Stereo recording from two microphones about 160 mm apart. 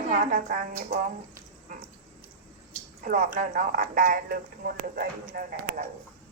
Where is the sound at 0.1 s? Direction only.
55° right (ahead or behind).